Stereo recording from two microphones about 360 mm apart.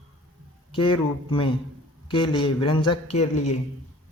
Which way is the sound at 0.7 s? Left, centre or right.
Centre.